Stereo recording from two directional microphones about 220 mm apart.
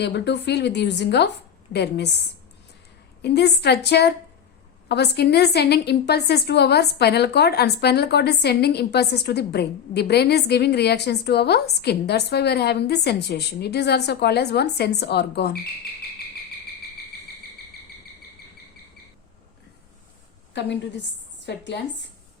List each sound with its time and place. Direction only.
0.0 s a woman's voice: 50° left (ahead or behind)
20.5 s a woman's voice: 50° left (ahead or behind)